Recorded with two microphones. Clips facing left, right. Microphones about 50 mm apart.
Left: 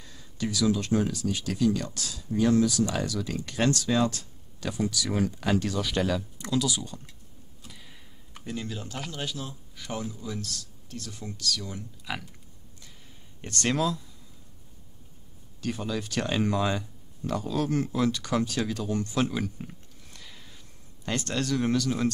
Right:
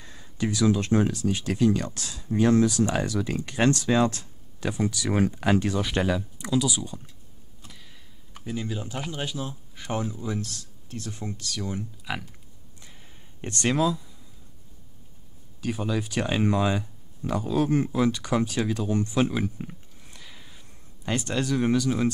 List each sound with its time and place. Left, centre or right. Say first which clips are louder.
0.0 s speech: right 3 dB; right
6.1 s speech: right 2 dB; centre
7.6 s speech: even; centre; by 11.8 s right
12.0 s speech: right 2 dB; centre
13.4 s speech: right 2 dB; right
13.7 s speech: right 3 dB; centre
15.6 s speech: right 3 dB; centre
19.6 s a sound: right 3 dB; centre